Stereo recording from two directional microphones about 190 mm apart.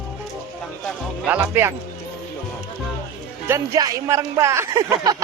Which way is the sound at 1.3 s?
10° right (ahead or behind).